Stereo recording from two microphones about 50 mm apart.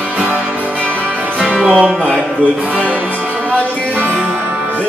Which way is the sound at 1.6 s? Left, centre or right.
Centre.